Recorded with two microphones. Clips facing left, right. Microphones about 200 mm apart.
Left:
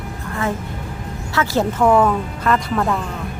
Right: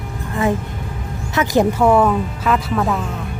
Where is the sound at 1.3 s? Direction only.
15° right (ahead or behind); by 3.0 s centre (ahead or behind).